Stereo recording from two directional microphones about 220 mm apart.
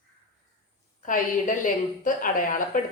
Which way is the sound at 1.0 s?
35° left (ahead or behind).